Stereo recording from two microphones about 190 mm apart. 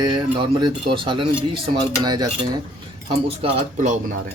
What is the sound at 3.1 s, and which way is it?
Cutlery, 35° right (ahead or behind).